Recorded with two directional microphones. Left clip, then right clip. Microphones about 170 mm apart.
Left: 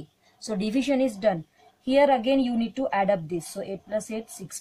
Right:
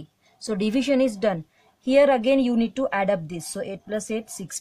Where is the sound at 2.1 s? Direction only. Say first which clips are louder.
Right 2 dB; 50° right (ahead or behind).